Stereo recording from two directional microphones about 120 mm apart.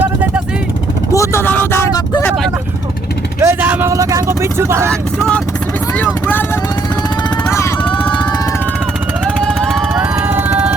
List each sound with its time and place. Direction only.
1.1 s a sound: 25° left (ahead or behind)
3.4 s vehicle: 15° right (ahead or behind)
3.9 s speech: 25° right (ahead or behind)
4.9 s speech: 5° left (ahead or behind)
9.4 s vehicle: 5° left (ahead or behind)
9.9 s vehicle: 20° right (ahead or behind)